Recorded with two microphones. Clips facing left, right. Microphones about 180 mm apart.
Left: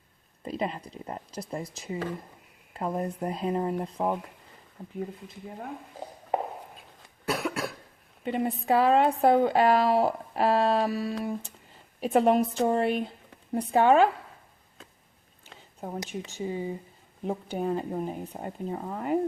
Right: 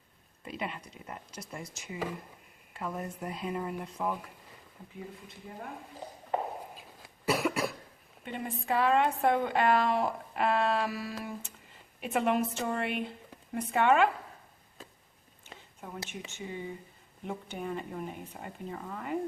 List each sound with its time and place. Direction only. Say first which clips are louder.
0.4 s a woman's voice: left 7 dB; 35° left (ahead or behind)
6.7 s cough: right 1 dB; centre (ahead or behind)
8.2 s a woman's voice: left 9 dB; 40° left (ahead or behind)
16.3 s a woman's voice: left 8 dB; 35° left (ahead or behind)